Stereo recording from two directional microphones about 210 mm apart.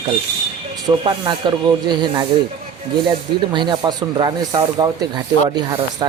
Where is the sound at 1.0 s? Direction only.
20° right (ahead or behind).